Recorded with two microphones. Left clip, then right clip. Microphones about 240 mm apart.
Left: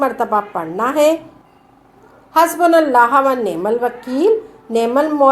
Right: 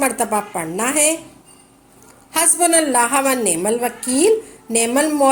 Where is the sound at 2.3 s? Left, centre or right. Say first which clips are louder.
Left 6 dB; right.